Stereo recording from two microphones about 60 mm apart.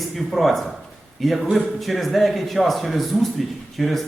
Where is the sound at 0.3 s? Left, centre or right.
Centre.